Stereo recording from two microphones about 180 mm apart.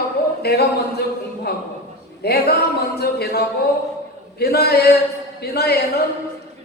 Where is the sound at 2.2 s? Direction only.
60° left (ahead or behind).